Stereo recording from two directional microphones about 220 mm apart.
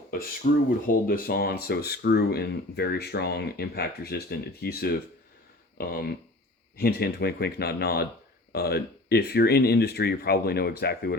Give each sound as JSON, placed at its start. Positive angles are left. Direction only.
{"t": 0.4, "sound": "speech", "side_deg": 40}